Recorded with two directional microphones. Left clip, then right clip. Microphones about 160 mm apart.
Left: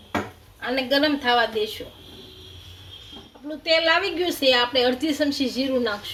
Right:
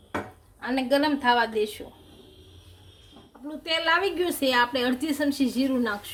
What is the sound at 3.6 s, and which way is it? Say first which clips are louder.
A woman's voice: left 4 dB; 50° right (ahead or behind).